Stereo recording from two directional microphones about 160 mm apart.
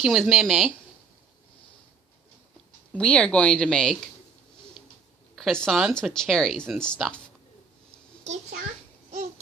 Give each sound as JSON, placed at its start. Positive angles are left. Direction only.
{"t": 0.0, "sound": "speech", "side_deg": 0}
{"t": 3.0, "sound": "speech", "side_deg": 5}
{"t": 5.4, "sound": "speech", "side_deg": 5}
{"t": 7.9, "sound": "a sound", "side_deg": -45}